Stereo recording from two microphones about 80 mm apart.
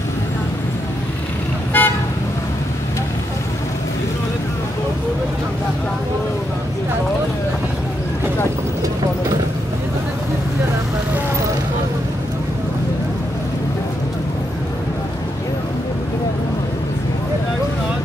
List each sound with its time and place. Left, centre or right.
1.7 s toot: left